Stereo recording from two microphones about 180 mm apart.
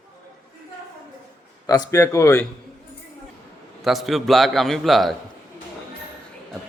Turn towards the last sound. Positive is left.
turn(degrees=0)  # may be behind; listen again after turning